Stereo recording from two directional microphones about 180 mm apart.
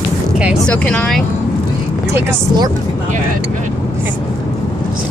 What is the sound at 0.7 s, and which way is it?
Speech, 5° left (ahead or behind).